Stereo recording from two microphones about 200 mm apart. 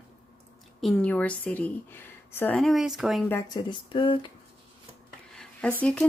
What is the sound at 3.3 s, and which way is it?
Speech, 15° left (ahead or behind).